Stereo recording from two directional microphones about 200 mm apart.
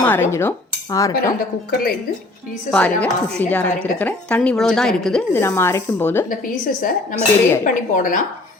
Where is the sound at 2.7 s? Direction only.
5° left (ahead or behind).